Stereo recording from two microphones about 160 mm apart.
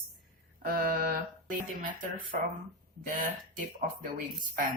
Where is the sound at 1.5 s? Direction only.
55° right (ahead or behind).